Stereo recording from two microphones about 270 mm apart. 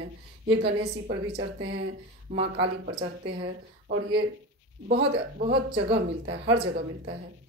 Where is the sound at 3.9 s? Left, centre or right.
Right.